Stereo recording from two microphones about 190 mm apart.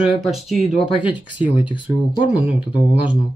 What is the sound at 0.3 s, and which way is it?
Speech, centre (ahead or behind).